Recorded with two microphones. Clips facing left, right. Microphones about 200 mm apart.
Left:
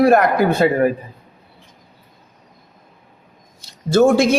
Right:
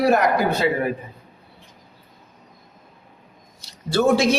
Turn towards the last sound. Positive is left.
turn(degrees=50)  # may be behind; listen again after turning